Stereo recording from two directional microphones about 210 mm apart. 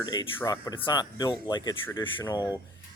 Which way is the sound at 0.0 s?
20° left (ahead or behind).